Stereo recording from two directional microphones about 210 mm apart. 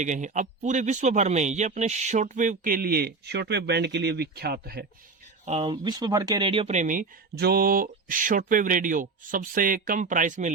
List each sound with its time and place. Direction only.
0.0 s speech: 35° right (ahead or behind)
5.5 s speech: 30° right (ahead or behind)
5.8 s speech: 20° right (ahead or behind); by 10.5 s 40° right (ahead or behind)